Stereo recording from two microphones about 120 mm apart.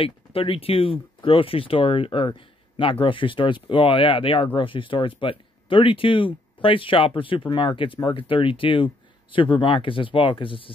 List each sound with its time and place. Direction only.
0.0 s speech: 50° left (ahead or behind)